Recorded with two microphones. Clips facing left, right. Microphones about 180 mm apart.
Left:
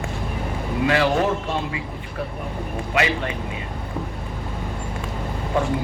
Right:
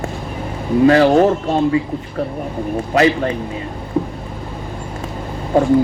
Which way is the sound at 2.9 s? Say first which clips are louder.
Right 8 dB; 40° right (ahead or behind).